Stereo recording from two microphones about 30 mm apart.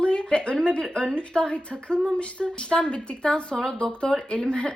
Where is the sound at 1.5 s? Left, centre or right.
Left.